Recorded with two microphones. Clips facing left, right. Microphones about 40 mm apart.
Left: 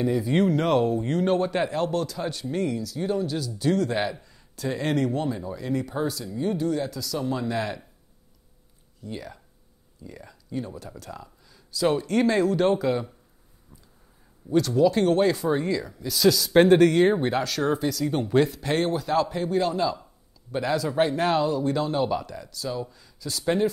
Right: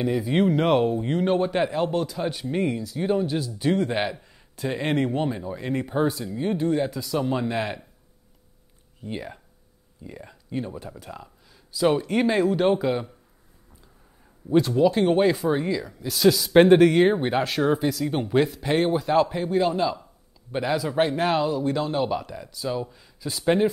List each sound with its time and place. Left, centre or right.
0.0 s a man's voice: centre
9.0 s speech: right; by 13.1 s centre
14.5 s a man's voice: right
17.6 s speech: centre